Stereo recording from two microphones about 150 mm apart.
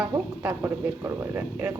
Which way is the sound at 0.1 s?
15° right (ahead or behind).